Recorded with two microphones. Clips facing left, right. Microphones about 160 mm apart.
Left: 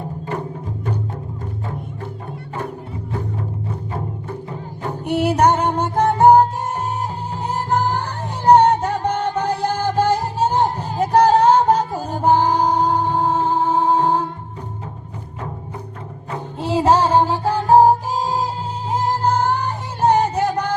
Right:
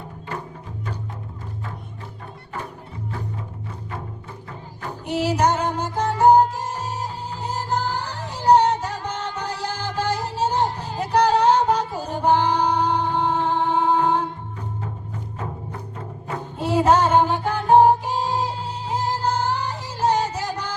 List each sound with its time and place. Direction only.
4.9 s music: 55° left (ahead or behind); by 14.3 s 40° left (ahead or behind)
16.6 s music: 30° left (ahead or behind); by 20.7 s 60° left (ahead or behind)